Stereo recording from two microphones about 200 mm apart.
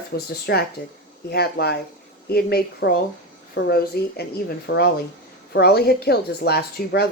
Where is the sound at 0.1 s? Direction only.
55° left (ahead or behind).